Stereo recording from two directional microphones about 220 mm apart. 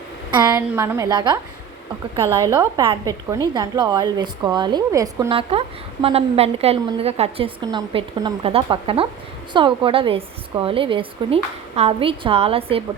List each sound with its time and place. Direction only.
0.3 s a woman's voice: 20° right (ahead or behind)